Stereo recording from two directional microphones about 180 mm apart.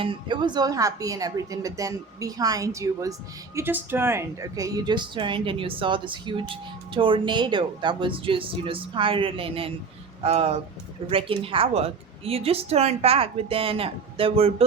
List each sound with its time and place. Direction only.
0.0 s a woman's voice: 25° right (ahead or behind)